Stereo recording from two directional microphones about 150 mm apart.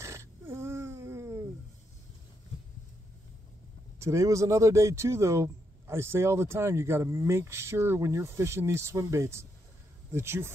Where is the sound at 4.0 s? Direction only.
20° right (ahead or behind).